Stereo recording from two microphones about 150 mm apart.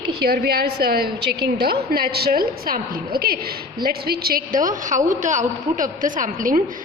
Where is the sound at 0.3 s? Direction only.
90° right.